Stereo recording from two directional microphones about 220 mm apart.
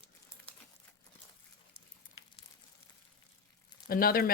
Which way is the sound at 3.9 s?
40° left (ahead or behind).